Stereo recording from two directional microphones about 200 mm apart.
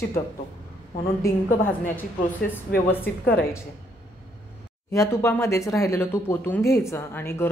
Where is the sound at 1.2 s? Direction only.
15° left (ahead or behind).